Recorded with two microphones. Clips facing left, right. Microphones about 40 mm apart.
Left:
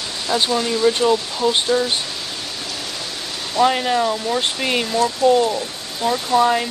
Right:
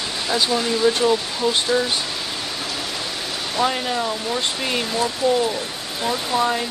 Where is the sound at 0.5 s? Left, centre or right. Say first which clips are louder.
Left 1 dB; centre.